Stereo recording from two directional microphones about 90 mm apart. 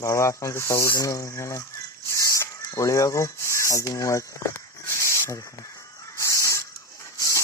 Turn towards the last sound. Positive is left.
turn(degrees=35)  # may be behind; listen again after turning